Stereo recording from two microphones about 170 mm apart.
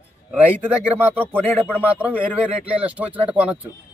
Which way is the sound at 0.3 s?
10° right (ahead or behind).